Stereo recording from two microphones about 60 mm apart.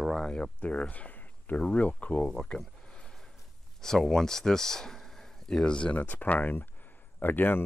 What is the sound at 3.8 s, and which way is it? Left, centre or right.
Speech, centre.